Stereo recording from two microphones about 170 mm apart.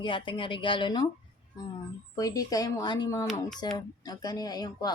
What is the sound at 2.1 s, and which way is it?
Speech, 20° left (ahead or behind).